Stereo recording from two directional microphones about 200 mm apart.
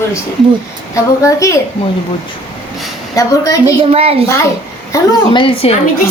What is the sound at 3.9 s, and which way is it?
Speech, 30° right (ahead or behind).